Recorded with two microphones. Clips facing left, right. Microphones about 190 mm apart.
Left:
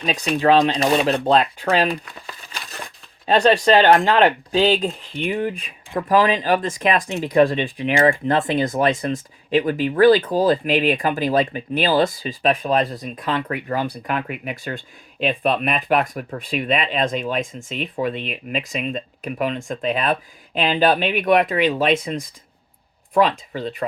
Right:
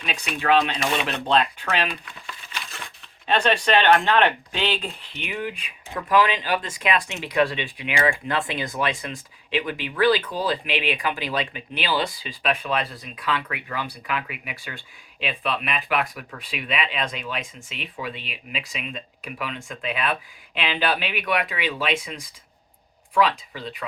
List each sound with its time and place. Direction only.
0.0 s speech: 40° left (ahead or behind)
5.9 s speech: 30° left (ahead or behind)